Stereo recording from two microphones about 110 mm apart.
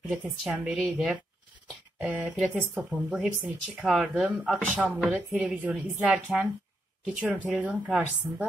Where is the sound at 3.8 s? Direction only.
Centre (ahead or behind).